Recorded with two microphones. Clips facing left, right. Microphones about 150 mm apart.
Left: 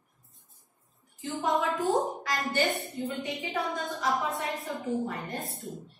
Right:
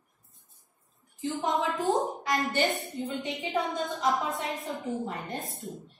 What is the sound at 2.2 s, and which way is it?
A woman's voice, 20° right (ahead or behind).